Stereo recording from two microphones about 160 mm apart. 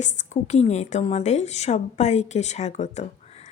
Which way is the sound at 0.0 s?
50° left (ahead or behind).